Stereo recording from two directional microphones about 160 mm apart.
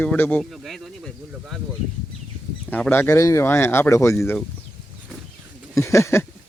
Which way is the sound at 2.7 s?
10° left (ahead or behind).